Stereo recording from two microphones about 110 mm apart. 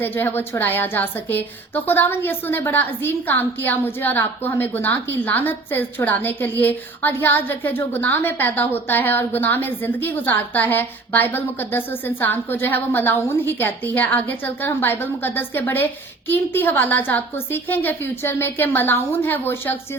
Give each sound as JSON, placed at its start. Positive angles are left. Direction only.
{"t": 0.0, "sound": "a woman's voice", "side_deg": 20}